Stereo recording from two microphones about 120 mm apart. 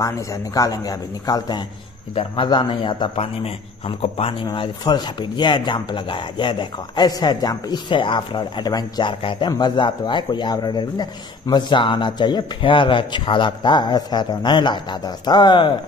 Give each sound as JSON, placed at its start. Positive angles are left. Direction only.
{"t": 0.0, "sound": "a man's voice", "side_deg": 30}
{"t": 3.2, "sound": "a man's voice", "side_deg": 55}
{"t": 4.6, "sound": "a man's voice", "side_deg": 40}